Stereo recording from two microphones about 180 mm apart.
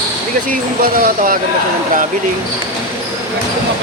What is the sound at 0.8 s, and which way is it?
Speech, 50° right (ahead or behind).